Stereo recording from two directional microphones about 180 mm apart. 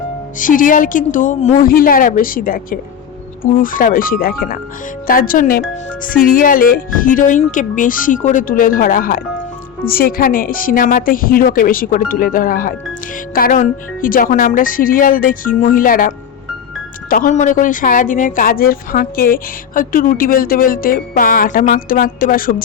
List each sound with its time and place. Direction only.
0.3 s a woman's voice: 50° left (ahead or behind)